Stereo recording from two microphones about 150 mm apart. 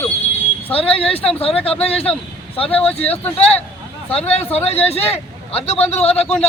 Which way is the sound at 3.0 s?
10° left (ahead or behind).